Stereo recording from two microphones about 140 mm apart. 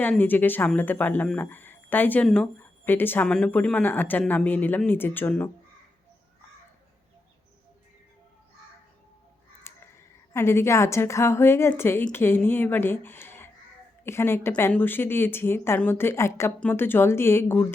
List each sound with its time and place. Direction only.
0.0 s speech: 10° left (ahead or behind)
9.7 s a sound: 15° left (ahead or behind)
10.3 s a woman's voice: 20° left (ahead or behind)